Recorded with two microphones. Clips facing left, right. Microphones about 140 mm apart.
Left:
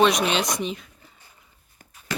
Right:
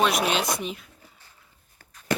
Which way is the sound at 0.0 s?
5° right (ahead or behind).